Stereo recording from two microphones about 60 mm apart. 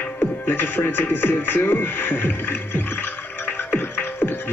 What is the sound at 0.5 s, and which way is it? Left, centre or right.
Speech, left.